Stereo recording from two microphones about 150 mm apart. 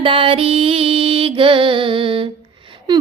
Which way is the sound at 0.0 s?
35° right (ahead or behind).